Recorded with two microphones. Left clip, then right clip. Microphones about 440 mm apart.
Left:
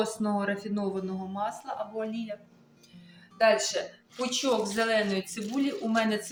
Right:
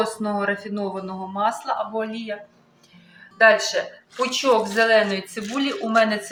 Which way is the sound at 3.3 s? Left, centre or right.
Left.